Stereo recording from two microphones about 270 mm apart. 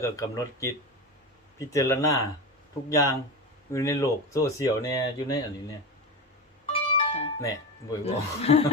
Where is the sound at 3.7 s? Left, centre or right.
Centre.